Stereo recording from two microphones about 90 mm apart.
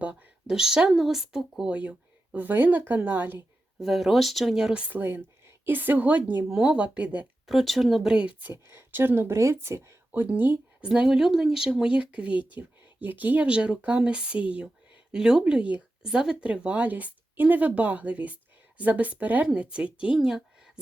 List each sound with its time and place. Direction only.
0.0 s speech: 15° right (ahead or behind)
0.4 s speech: 5° right (ahead or behind)
3.8 s speech: centre (ahead or behind); by 6.4 s 20° right (ahead or behind)
6.5 s speech: 10° right (ahead or behind)
7.4 s speech: centre (ahead or behind); by 8.5 s 15° right (ahead or behind)
8.5 s speech: 25° right (ahead or behind)
10.1 s speech: 20° right (ahead or behind)